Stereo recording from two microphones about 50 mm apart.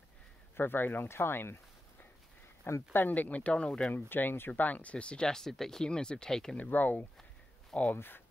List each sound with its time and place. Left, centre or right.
0.6 s speech: left
2.9 s speech: left; by 3.9 s centre
3.9 s speech: left
4.5 s speech: left; by 6.5 s centre
6.5 s speech: left
7.9 s speech: left